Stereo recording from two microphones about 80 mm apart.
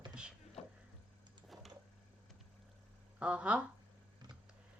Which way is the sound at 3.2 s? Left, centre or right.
Centre.